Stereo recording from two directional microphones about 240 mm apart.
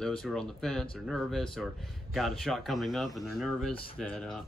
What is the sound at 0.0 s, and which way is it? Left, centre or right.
Speech, centre.